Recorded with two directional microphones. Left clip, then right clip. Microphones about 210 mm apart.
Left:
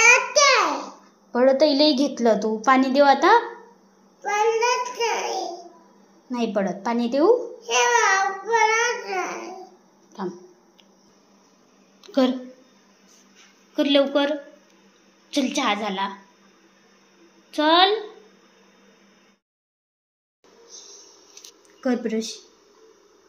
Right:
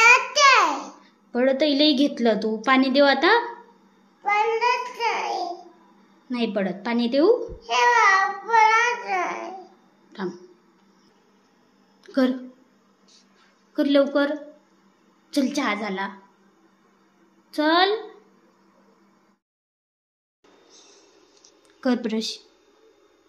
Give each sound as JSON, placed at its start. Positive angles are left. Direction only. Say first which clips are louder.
{"t": 0.0, "sound": "a sound", "louder": "even", "side_deg": -20}
{"t": 1.3, "sound": "a woman's voice", "louder": "left 3 dB", "side_deg": -10}
{"t": 4.2, "sound": "child singing", "louder": "even", "side_deg": -15}
{"t": 6.3, "sound": "babbling", "louder": "left 1 dB", "side_deg": -10}
{"t": 12.0, "sound": "a sound", "louder": "left 2 dB", "side_deg": -10}
{"t": 13.9, "sound": "a woman's voice", "louder": "even", "side_deg": -15}
{"t": 15.4, "sound": "a woman's voice", "louder": "left 3 dB", "side_deg": -20}
{"t": 17.6, "sound": "a woman's voice", "louder": "left 2 dB", "side_deg": -15}
{"t": 21.8, "sound": "a woman's voice", "louder": "even", "side_deg": -15}